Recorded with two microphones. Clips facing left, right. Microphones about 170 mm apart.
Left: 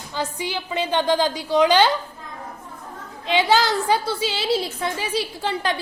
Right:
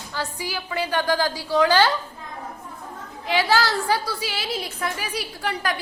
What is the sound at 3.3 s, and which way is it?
A woman's voice, 20° left (ahead or behind).